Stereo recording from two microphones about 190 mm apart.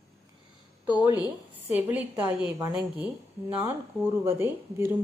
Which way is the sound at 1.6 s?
10° right (ahead or behind).